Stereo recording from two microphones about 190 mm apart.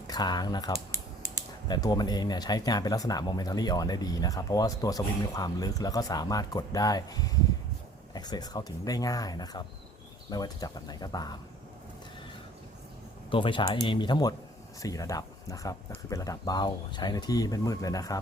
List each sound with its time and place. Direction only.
0.1 s speech: 20° left (ahead or behind)
13.3 s speech: 25° left (ahead or behind)